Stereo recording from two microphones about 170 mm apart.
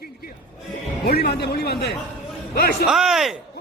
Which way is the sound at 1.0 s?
65° left (ahead or behind).